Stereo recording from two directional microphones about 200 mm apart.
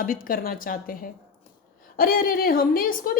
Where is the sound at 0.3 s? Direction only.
45° left (ahead or behind).